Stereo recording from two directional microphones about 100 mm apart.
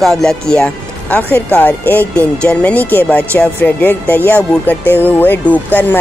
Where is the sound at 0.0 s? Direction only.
5° left (ahead or behind).